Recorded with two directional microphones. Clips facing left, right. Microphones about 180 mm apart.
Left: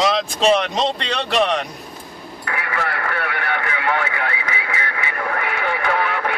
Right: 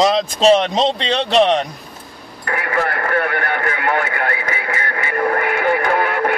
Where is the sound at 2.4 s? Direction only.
45° right (ahead or behind).